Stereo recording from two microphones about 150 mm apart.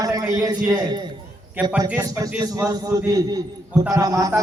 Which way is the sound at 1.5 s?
10° right (ahead or behind).